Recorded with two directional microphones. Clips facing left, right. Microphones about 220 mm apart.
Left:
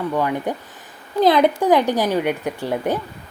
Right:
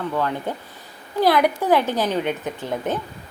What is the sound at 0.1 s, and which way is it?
A woman's voice, 15° left (ahead or behind).